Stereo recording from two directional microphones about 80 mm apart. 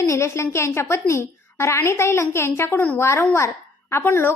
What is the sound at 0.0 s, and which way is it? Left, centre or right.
A woman's voice, left.